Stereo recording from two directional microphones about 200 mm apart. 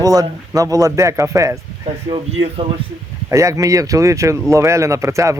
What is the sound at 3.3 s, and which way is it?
A man's voice, 15° right (ahead or behind).